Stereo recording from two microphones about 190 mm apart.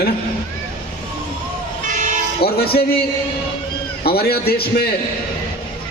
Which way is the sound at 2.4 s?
55° left (ahead or behind).